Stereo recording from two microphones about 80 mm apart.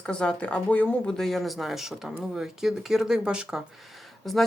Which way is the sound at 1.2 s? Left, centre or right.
Centre.